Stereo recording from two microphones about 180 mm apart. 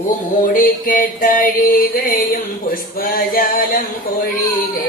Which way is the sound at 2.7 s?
55° left (ahead or behind).